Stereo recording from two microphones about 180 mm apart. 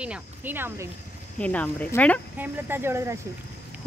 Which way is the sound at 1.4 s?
10° left (ahead or behind).